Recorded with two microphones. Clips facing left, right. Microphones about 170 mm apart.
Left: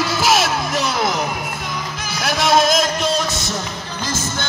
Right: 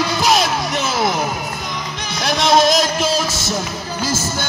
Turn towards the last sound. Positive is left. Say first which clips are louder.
# right 3 dB
turn(degrees=-10)  # may be behind; listen again after turning